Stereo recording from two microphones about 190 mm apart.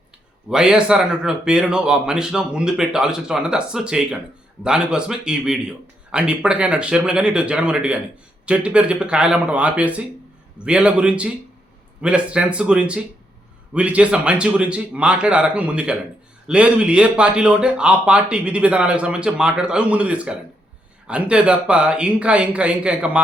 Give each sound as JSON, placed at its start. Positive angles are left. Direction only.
{"t": 0.5, "sound": "speech", "side_deg": -5}